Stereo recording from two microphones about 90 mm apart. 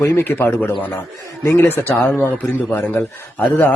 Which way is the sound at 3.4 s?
20° left (ahead or behind).